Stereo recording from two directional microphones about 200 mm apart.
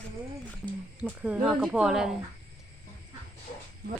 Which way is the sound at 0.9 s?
10° right (ahead or behind).